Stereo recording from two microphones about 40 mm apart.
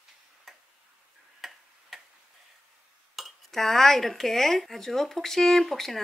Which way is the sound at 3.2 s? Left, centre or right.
Centre.